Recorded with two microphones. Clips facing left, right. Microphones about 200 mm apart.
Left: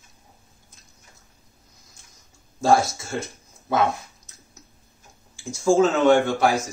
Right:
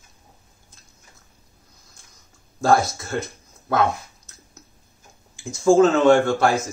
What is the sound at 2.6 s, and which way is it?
Speech, 25° left (ahead or behind).